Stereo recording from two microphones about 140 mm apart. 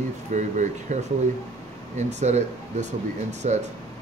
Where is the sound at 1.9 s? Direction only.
55° right (ahead or behind).